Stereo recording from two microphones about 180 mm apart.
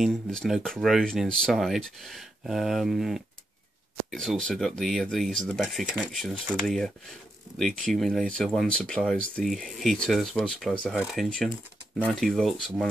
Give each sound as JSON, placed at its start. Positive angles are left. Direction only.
{"t": 0.0, "sound": "speech", "side_deg": 0}